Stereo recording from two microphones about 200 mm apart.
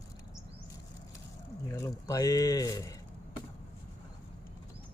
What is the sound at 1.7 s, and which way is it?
Speech, 15° left (ahead or behind).